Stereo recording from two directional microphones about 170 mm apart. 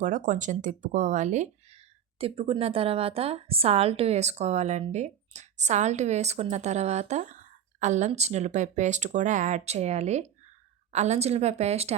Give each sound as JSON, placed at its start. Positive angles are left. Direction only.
{"t": 0.0, "sound": "speech", "side_deg": -50}
{"t": 2.1, "sound": "a woman's voice", "side_deg": -35}